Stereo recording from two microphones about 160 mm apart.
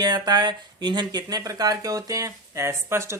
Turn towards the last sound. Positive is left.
turn(degrees=-15)  # may be behind; listen again after turning